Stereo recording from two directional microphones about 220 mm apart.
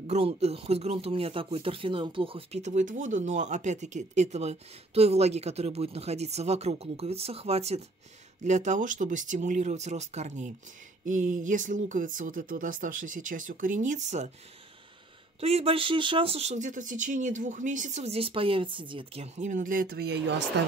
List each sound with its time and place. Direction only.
0.0 s speech: 30° right (ahead or behind)
15.4 s speech: 25° right (ahead or behind); by 20.7 s 50° right (ahead or behind)